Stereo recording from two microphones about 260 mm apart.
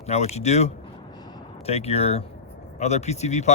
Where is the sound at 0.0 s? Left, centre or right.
Left.